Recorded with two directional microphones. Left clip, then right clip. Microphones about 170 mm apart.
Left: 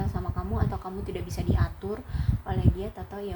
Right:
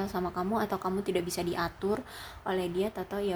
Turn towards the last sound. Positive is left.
turn(degrees=-25)  # may be behind; listen again after turning